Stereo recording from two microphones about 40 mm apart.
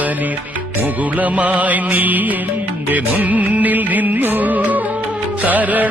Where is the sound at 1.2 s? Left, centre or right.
Right.